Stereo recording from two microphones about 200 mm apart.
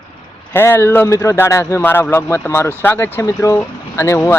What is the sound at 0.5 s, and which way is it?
Speech, 10° left (ahead or behind).